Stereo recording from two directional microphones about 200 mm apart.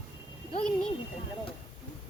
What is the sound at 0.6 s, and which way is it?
Speech, 5° left (ahead or behind).